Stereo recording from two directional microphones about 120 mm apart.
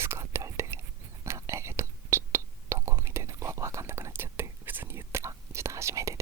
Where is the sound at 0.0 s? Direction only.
20° right (ahead or behind).